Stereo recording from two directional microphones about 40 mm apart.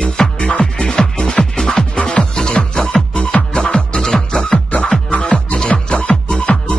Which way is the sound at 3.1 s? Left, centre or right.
Left.